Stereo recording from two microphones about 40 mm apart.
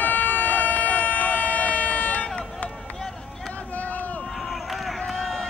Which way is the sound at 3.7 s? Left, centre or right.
Left.